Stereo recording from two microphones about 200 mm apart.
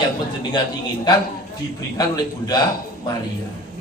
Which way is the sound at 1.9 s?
20° left (ahead or behind).